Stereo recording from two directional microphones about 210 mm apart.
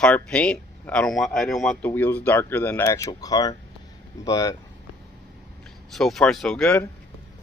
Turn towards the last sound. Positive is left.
turn(degrees=5)  # may be behind; listen again after turning